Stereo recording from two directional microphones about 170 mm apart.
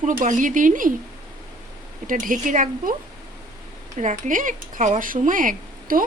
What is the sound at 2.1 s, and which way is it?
Speech, 50° right (ahead or behind).